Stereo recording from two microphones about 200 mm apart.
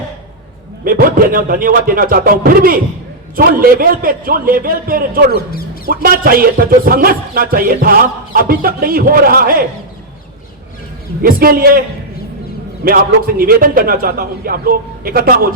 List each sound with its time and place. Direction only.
0.9 s speech: 45° right (ahead or behind)
5.3 s speech: 50° left (ahead or behind)
5.9 s speech: 45° right (ahead or behind)
11.2 s speech: 45° right (ahead or behind)
12.8 s speech: 45° right (ahead or behind)